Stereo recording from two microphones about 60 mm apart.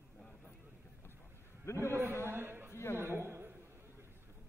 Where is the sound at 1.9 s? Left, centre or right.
Right.